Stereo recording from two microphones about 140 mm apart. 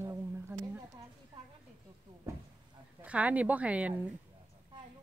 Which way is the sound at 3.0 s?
10° right (ahead or behind).